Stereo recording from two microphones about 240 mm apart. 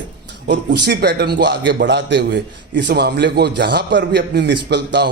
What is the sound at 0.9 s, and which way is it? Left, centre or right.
A man's voice, right.